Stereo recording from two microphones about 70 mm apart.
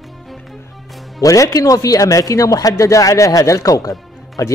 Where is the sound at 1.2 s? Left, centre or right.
Left.